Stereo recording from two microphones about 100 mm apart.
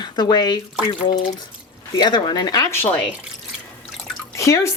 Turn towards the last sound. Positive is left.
turn(degrees=30)  # may be behind; listen again after turning